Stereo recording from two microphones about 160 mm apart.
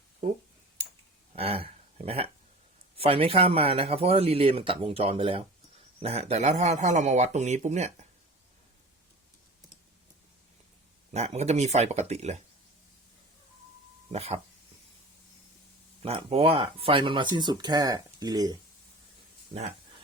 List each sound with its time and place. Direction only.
1.4 s a man's voice: 35° right (ahead or behind)
11.1 s a man's voice: 45° right (ahead or behind)
14.1 s speech: 40° right (ahead or behind)
16.0 s speech: 40° right (ahead or behind)